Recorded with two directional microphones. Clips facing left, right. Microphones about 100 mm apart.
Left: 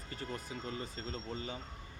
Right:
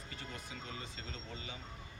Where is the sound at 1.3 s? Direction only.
40° left (ahead or behind).